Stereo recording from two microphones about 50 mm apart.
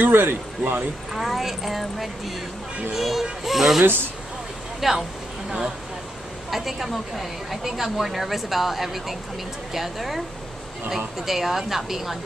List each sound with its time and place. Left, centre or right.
0.0 s speech: right
1.1 s a woman's voice: centre
6.5 s a woman's voice: centre